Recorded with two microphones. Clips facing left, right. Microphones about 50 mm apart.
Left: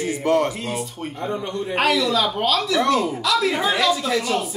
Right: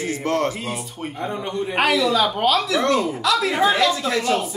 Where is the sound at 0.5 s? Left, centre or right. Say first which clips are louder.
Left 1 dB; centre.